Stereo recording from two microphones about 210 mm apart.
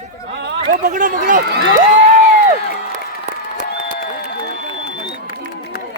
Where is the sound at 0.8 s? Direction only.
40° right (ahead or behind).